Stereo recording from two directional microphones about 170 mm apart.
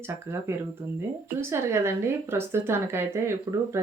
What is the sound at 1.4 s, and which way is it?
Speech, 15° right (ahead or behind).